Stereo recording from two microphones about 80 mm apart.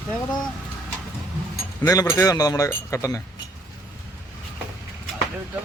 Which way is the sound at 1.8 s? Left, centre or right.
Left.